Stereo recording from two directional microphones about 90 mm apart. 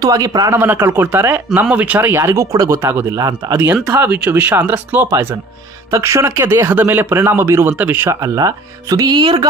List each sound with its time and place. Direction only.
0.0 s speech: 45° right (ahead or behind)
0.5 s speech: 25° right (ahead or behind)
2.8 s speech: 25° right (ahead or behind)
3.2 s speech: 45° right (ahead or behind)
3.7 s speech: 10° right (ahead or behind)
8.1 s speech: 40° right (ahead or behind)
9.1 s speech: 70° right (ahead or behind)